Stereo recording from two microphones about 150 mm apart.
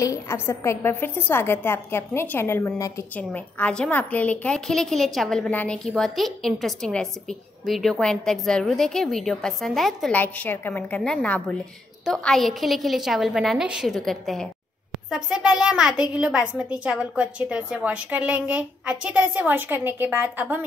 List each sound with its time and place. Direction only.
0.0 s a woman's voice: 20° left (ahead or behind); by 20.6 s 10° right (ahead or behind)